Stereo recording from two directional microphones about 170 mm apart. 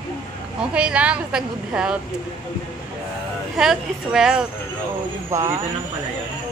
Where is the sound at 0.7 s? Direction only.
5° right (ahead or behind).